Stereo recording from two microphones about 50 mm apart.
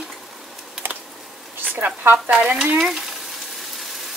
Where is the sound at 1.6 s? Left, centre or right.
Right.